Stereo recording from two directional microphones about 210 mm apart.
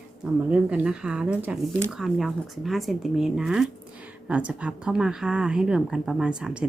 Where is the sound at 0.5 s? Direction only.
5° right (ahead or behind).